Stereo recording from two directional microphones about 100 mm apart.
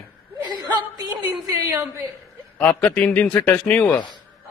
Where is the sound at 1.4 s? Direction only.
35° right (ahead or behind).